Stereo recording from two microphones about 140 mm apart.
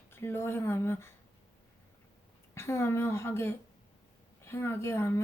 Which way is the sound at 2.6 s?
20° left (ahead or behind).